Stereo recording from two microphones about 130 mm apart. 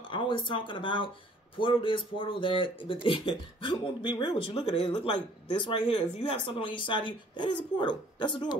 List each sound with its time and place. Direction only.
0.1 s speech: 40° left (ahead or behind)